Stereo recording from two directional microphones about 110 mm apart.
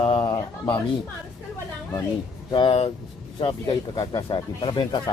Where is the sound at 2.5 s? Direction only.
55° left (ahead or behind).